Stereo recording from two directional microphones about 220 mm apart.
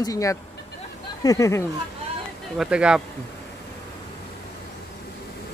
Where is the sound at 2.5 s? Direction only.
5° right (ahead or behind).